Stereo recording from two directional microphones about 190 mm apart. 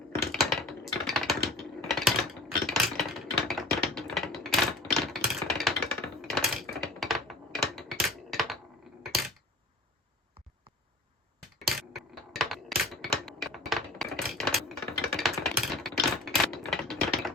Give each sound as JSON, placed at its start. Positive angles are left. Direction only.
{"t": 0.2, "sound": "typing", "side_deg": 0}
{"t": 2.6, "sound": "a sound", "side_deg": 0}
{"t": 11.9, "sound": "mechanisms", "side_deg": 0}